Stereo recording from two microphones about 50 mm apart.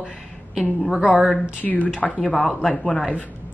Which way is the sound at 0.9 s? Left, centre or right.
Centre.